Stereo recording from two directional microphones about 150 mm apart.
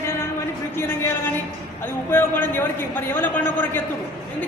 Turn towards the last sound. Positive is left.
turn(degrees=15)  # may be behind; listen again after turning